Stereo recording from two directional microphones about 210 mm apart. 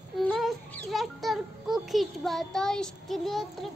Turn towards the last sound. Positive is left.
turn(degrees=0)  # may be behind; listen again after turning